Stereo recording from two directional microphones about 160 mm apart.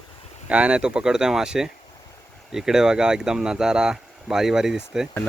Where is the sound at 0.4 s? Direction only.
5° right (ahead or behind).